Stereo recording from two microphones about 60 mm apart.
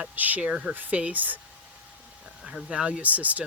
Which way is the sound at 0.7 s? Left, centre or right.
Right.